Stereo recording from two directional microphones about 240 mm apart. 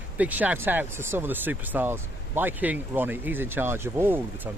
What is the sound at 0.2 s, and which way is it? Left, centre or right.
Speech, centre.